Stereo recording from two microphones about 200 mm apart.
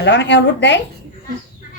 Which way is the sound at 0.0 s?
60° left (ahead or behind).